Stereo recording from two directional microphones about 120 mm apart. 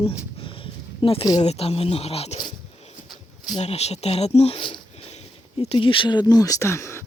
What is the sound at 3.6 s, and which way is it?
Speech, 65° left (ahead or behind).